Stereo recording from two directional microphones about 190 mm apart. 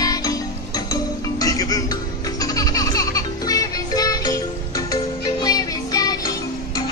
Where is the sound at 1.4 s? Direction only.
20° left (ahead or behind).